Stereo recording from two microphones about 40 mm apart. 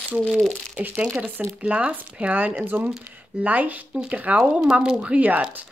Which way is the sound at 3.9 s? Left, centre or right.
Right.